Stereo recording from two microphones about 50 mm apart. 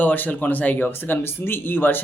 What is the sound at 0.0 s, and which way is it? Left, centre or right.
Speech, left.